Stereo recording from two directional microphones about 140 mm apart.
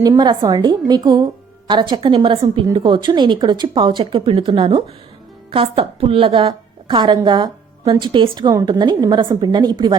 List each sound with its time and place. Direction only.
0.0 s a woman's voice: 30° right (ahead or behind)